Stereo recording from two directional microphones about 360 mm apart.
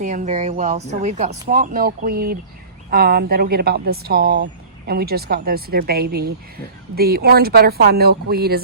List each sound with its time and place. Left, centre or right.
0.0 s speech: right